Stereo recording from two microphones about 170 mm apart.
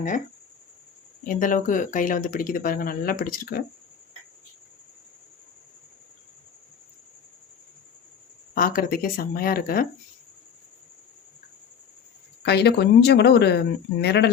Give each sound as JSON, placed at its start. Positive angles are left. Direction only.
{"t": 1.2, "sound": "speech", "side_deg": 50}
{"t": 8.5, "sound": "speech", "side_deg": 60}
{"t": 12.4, "sound": "speech", "side_deg": 75}